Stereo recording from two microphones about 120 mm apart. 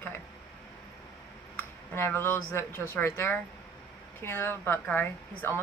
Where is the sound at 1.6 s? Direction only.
20° left (ahead or behind).